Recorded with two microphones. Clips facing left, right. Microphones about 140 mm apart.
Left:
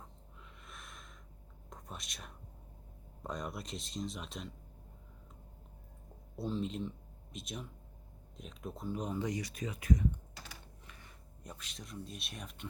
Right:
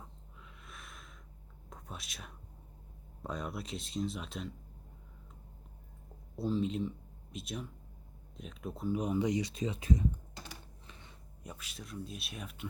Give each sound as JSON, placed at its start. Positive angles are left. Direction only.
{"t": 0.6, "sound": "snort", "side_deg": 0}
{"t": 1.7, "sound": "speech", "side_deg": 0}
{"t": 6.3, "sound": "speech", "side_deg": 0}
{"t": 10.8, "sound": "a sound", "side_deg": -25}
{"t": 11.4, "sound": "speech", "side_deg": -5}